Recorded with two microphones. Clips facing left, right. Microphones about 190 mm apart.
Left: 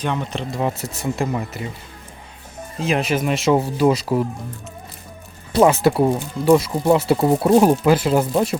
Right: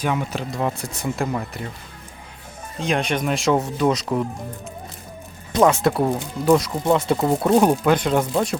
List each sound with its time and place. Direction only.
0.0 s speech: 5° right (ahead or behind)
2.8 s speech: 5° left (ahead or behind)
5.5 s speech: 5° left (ahead or behind)